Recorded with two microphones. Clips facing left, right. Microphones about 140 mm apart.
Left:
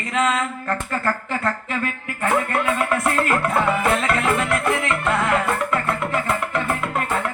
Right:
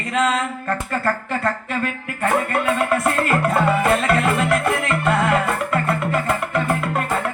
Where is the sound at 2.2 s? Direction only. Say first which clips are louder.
Right 1 dB; 40° right (ahead or behind).